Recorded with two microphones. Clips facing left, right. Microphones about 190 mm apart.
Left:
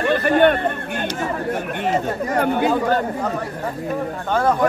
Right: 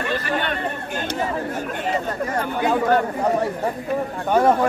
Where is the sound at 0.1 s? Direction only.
55° left (ahead or behind).